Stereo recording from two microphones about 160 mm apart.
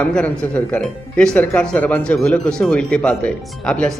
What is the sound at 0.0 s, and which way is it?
Speech, 5° left (ahead or behind).